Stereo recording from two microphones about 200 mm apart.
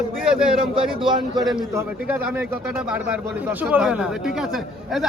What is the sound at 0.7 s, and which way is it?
Speech, 25° right (ahead or behind).